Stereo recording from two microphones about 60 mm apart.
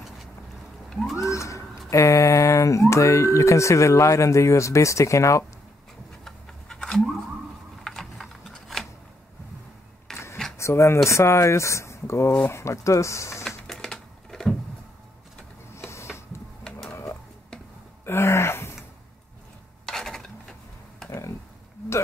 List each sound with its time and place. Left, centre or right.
0.8 s cat: centre
1.1 s bird: left
2.9 s speech: left
6.2 s scratch: centre
7.8 s a sound: centre
10.1 s a sound: centre
10.6 s speech: left
13.7 s a sound: centre
15.7 s printer: left
16.9 s a sound: left
18.0 s gasp: left
19.9 s stir: centre